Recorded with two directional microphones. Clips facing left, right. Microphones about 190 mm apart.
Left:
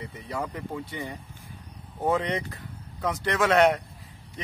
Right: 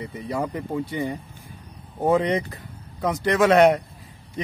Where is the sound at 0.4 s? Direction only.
20° right (ahead or behind).